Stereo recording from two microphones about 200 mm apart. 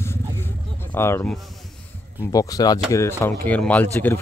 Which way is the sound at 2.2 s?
15° left (ahead or behind).